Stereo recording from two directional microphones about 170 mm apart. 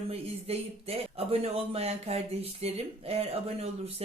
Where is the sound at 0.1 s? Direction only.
35° right (ahead or behind).